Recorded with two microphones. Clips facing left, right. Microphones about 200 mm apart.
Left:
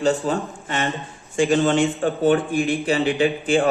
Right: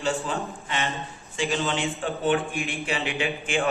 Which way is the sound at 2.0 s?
40° left (ahead or behind).